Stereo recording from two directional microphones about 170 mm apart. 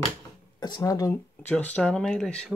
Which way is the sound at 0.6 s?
20° left (ahead or behind).